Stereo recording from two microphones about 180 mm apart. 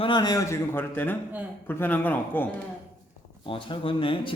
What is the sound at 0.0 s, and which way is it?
A man's voice, 25° left (ahead or behind).